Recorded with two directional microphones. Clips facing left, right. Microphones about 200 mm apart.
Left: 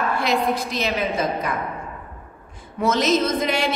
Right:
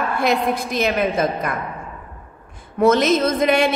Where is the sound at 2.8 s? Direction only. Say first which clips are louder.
Right 4 dB; 55° right (ahead or behind).